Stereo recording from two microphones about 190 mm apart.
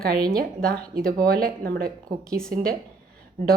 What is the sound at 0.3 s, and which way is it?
Speech, 50° right (ahead or behind).